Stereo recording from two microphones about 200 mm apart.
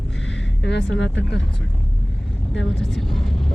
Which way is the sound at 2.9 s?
Centre (ahead or behind).